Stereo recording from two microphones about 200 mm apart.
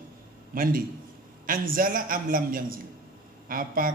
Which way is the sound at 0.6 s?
45° right (ahead or behind).